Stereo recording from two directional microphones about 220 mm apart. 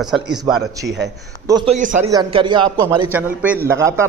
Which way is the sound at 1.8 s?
35° right (ahead or behind).